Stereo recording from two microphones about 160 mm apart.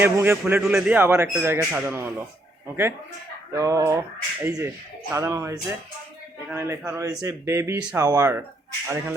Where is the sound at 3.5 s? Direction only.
20° right (ahead or behind).